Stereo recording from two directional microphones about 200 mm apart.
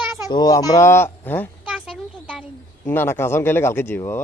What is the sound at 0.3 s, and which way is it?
A man's voice, 20° left (ahead or behind).